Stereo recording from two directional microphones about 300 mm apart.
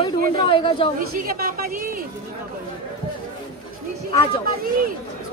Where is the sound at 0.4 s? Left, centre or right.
Centre.